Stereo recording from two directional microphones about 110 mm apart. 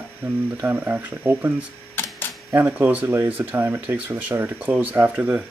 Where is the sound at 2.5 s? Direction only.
20° right (ahead or behind).